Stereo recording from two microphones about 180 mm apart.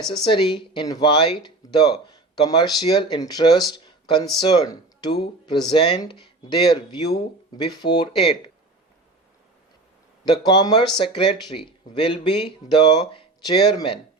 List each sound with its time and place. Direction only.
0.3 s speech: 25° left (ahead or behind)
10.2 s speech: 25° left (ahead or behind)